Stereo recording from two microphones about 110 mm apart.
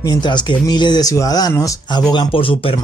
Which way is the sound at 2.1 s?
55° left (ahead or behind).